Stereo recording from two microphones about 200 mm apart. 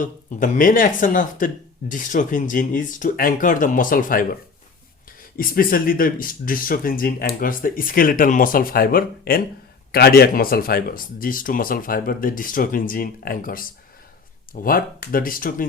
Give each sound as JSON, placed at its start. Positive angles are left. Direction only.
{"t": 0.0, "sound": "speech", "side_deg": 40}
{"t": 5.4, "sound": "speech", "side_deg": 45}